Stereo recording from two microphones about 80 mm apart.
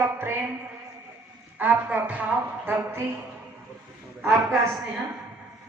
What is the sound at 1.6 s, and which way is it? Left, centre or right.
A woman's voice, centre.